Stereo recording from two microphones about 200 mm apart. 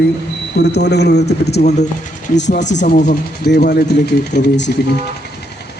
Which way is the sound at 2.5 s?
35° left (ahead or behind).